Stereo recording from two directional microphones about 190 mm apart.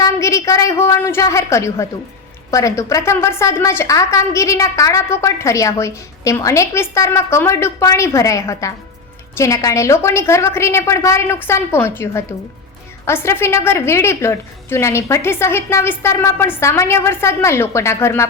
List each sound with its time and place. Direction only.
0.0 s a woman's voice: 15° left (ahead or behind)